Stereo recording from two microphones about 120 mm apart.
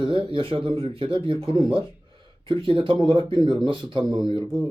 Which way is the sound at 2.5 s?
45° right (ahead or behind).